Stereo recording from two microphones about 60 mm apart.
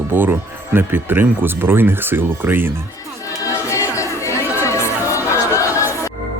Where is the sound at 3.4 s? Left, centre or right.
Left.